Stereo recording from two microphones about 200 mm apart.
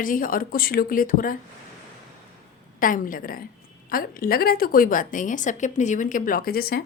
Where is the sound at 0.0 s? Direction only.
45° left (ahead or behind).